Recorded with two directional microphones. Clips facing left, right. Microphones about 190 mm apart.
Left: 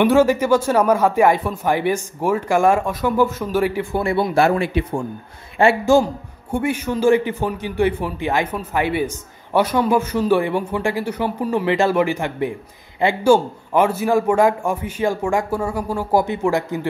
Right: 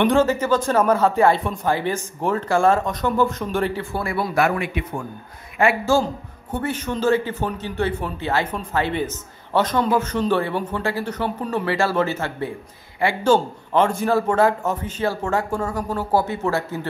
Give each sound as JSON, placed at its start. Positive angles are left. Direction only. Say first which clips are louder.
{"t": 0.0, "sound": "a man's voice", "louder": "left 3 dB", "side_deg": 10}
{"t": 4.0, "sound": "a man's voice", "louder": "left 4 dB", "side_deg": 25}
{"t": 6.5, "sound": "a man's voice", "louder": "left 4 dB", "side_deg": 10}